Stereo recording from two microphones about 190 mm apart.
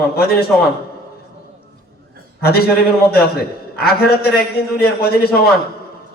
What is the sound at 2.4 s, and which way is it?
A man's voice, 55° left (ahead or behind).